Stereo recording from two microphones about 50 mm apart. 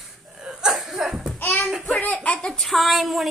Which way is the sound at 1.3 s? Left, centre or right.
Left.